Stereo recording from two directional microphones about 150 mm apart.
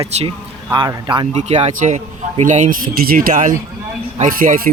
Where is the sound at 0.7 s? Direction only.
30° right (ahead or behind).